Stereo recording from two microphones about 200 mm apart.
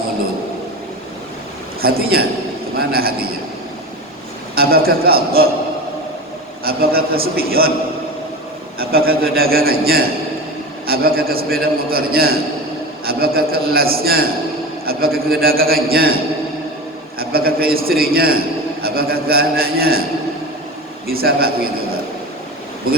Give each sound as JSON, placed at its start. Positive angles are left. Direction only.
{"t": 1.8, "sound": "a man's voice", "side_deg": -50}
{"t": 4.5, "sound": "a man's voice", "side_deg": -50}
{"t": 6.7, "sound": "a man's voice", "side_deg": -50}
{"t": 8.8, "sound": "a man's voice", "side_deg": -50}
{"t": 15.4, "sound": "a man's voice", "side_deg": -50}
{"t": 17.2, "sound": "a man's voice", "side_deg": -50}
{"t": 21.1, "sound": "a man's voice", "side_deg": -50}